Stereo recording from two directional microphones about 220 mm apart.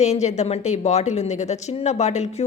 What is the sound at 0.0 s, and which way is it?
A woman's voice, 30° left (ahead or behind).